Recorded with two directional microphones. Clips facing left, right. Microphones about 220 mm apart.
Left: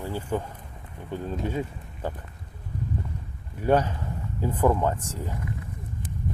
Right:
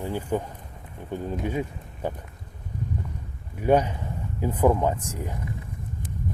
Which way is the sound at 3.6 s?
15° right (ahead or behind).